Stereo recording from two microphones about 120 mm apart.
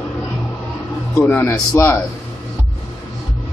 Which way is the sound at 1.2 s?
20° left (ahead or behind).